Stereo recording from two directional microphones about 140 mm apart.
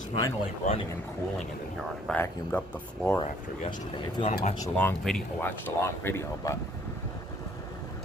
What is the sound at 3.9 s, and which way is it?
Speech, 35° left (ahead or behind).